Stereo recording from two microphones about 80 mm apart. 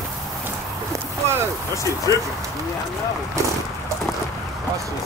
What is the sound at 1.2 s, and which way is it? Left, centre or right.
Boat, right.